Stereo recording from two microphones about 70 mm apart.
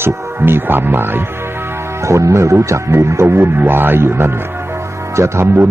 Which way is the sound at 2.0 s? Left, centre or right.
Right.